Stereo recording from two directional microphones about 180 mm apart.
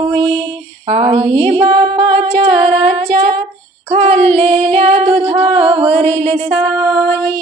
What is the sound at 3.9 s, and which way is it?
Female singing, 35° right (ahead or behind).